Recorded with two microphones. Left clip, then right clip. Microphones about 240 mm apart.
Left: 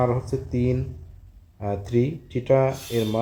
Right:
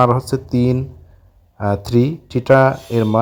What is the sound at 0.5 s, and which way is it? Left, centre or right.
Speech, right.